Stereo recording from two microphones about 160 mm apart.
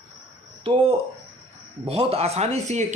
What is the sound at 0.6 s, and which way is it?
Speech, 35° right (ahead or behind).